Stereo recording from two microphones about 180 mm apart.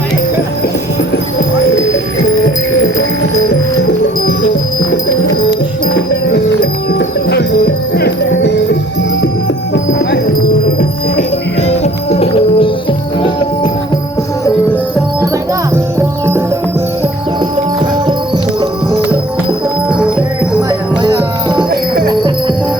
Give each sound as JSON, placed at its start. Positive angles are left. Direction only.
{"t": 5.5, "sound": "music", "side_deg": 65}
{"t": 9.7, "sound": "clip-clop", "side_deg": 75}
{"t": 10.8, "sound": "music", "side_deg": 40}
{"t": 20.6, "sound": "music", "side_deg": -20}